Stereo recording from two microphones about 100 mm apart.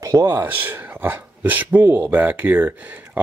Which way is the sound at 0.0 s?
25° right (ahead or behind).